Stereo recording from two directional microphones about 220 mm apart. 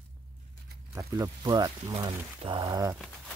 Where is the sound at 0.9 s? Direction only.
15° right (ahead or behind).